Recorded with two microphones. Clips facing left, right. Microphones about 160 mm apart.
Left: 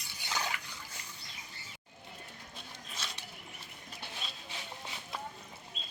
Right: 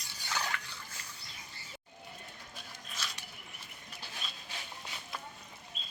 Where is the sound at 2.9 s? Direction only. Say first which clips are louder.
Even; 30° left (ahead or behind).